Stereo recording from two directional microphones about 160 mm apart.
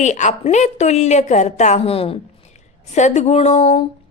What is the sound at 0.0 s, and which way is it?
A woman's voice, 50° left (ahead or behind).